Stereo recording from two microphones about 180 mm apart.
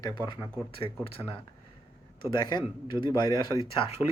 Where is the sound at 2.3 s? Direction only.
25° left (ahead or behind).